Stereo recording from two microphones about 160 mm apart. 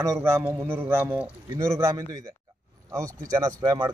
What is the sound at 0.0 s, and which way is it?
A man's voice, 15° right (ahead or behind).